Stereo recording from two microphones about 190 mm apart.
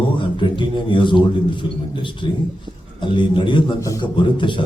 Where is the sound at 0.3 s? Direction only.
25° left (ahead or behind).